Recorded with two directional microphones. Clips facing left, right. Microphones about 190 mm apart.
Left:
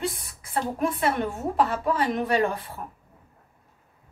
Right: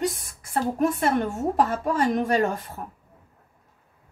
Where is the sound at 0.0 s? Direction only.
45° right (ahead or behind).